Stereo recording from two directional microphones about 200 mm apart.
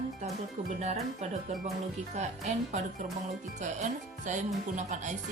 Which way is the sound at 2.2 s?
35° right (ahead or behind).